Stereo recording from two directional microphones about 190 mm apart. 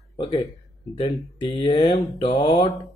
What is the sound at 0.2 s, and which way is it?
Speech, 20° left (ahead or behind).